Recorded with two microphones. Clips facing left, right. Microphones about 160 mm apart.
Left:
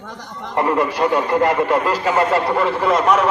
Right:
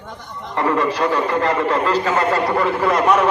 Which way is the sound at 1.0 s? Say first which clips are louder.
Left 5 dB; 20° left (ahead or behind).